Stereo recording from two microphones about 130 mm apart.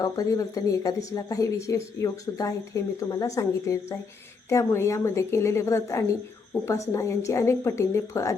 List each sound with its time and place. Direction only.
0.0 s speech: 25° left (ahead or behind)